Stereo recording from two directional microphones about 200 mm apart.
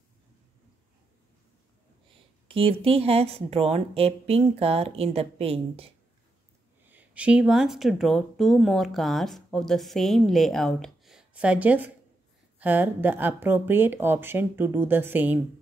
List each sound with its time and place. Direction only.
2.4 s speech: 25° right (ahead or behind)
6.9 s speech: 5° right (ahead or behind)